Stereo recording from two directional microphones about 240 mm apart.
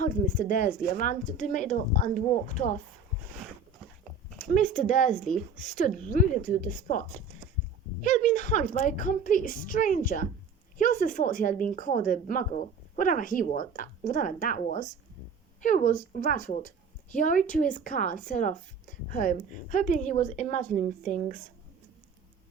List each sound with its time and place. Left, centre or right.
0.0 s a woman's voice: left
4.4 s a woman's voice: left
8.0 s a woman's voice: left